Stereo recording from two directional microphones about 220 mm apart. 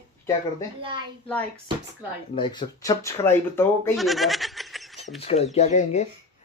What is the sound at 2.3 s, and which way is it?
Speech, 20° left (ahead or behind).